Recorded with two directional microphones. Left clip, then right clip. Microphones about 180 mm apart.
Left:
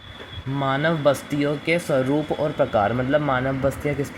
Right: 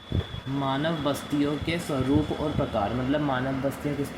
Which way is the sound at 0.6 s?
55° left (ahead or behind).